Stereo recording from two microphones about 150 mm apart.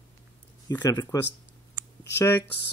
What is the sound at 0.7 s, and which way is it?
Speech, 25° left (ahead or behind).